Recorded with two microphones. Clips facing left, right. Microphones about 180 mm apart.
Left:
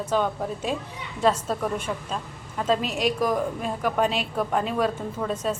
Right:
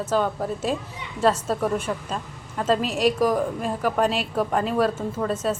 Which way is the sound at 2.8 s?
35° right (ahead or behind).